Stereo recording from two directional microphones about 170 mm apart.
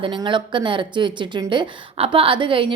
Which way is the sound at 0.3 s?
30° right (ahead or behind).